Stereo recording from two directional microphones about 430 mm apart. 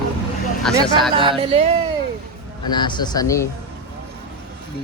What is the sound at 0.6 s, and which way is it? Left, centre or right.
Speech, centre.